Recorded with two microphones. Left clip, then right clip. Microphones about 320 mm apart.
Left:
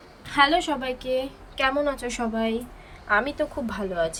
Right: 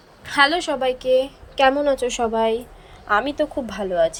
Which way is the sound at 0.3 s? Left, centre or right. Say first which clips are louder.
Right 3 dB; centre.